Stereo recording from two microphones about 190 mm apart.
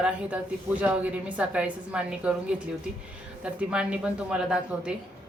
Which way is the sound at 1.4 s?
5° right (ahead or behind).